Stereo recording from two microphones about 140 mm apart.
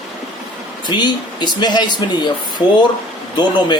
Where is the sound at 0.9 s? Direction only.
30° left (ahead or behind).